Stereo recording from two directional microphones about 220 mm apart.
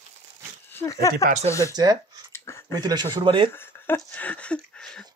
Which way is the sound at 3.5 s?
10° left (ahead or behind).